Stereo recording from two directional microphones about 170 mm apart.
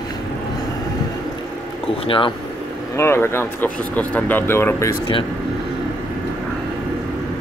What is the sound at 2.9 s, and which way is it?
Speech, 15° left (ahead or behind).